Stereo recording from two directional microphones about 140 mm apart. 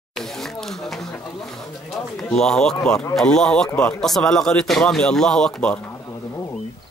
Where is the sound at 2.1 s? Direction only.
5° left (ahead or behind).